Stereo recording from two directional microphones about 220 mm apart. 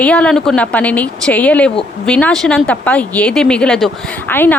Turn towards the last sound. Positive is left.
turn(degrees=10)  # may be behind; listen again after turning